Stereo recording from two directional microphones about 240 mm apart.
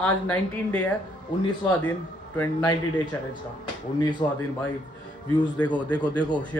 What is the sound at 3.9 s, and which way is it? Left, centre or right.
Speech, centre.